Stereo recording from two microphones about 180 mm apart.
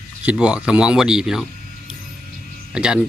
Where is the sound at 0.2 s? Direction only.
5° right (ahead or behind).